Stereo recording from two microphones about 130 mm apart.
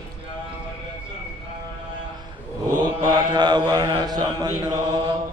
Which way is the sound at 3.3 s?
35° right (ahead or behind).